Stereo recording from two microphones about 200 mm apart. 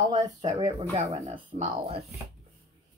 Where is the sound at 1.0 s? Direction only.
30° right (ahead or behind).